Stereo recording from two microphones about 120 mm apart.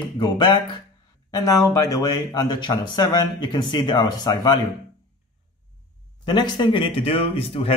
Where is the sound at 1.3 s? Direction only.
30° left (ahead or behind).